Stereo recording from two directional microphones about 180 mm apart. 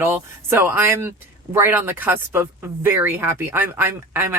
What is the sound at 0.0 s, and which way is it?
Speech, 10° right (ahead or behind).